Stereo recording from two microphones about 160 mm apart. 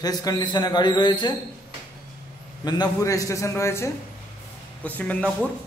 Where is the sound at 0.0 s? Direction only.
25° left (ahead or behind).